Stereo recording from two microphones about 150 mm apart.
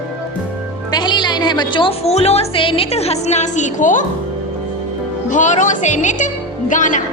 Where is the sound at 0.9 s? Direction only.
30° left (ahead or behind); by 4.0 s 55° left (ahead or behind).